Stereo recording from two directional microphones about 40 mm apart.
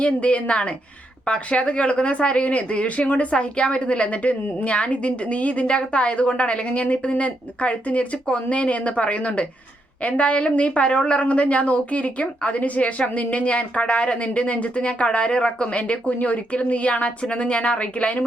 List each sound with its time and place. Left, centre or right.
0.0 s a woman's voice: left